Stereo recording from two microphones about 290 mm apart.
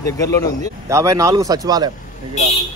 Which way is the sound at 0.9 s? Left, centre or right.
Centre.